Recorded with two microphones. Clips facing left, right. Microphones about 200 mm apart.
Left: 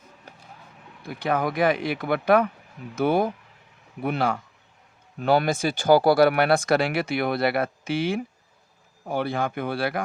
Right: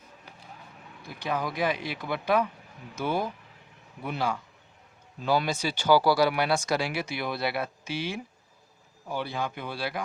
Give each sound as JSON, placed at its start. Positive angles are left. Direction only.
{"t": 1.0, "sound": "speech", "side_deg": 55}